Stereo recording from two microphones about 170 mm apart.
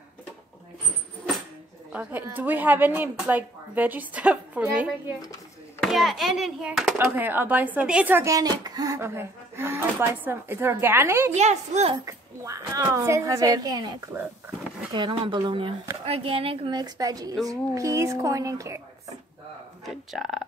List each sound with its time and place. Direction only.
1.9 s a child's voice: 10° right (ahead or behind)
7.0 s speech: 10° right (ahead or behind)
11.3 s a child's voice: 40° right (ahead or behind)
12.0 s speech: 20° right (ahead or behind)
19.8 s speech: centre (ahead or behind)